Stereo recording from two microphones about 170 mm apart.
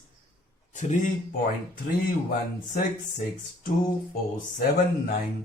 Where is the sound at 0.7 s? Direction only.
45° left (ahead or behind).